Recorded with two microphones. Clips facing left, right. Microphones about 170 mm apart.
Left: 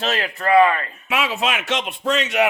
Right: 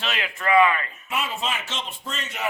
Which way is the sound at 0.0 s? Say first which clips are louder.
Left 5 dB; 40° left (ahead or behind).